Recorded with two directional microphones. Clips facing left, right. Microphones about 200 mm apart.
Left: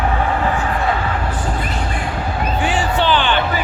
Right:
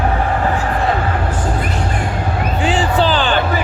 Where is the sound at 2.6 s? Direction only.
30° right (ahead or behind).